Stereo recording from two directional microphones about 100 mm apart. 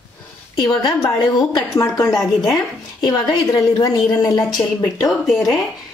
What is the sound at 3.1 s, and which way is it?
A woman's voice, 45° left (ahead or behind).